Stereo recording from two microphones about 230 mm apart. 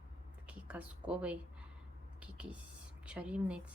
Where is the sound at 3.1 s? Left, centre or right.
Centre.